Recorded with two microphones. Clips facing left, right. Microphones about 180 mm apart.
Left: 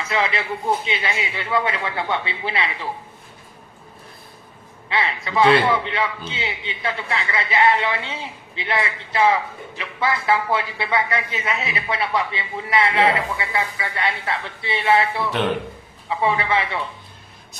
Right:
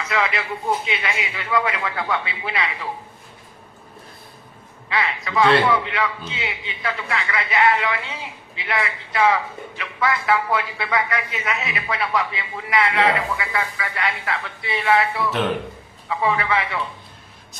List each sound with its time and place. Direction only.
0.0 s a man's voice: 30° left (ahead or behind)
4.8 s a man's voice: 30° left (ahead or behind)